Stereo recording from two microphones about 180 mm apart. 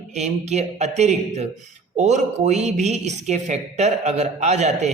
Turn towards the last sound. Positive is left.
turn(degrees=-40)  # may be behind; listen again after turning